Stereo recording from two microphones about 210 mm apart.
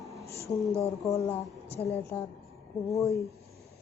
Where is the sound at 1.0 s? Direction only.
15° left (ahead or behind).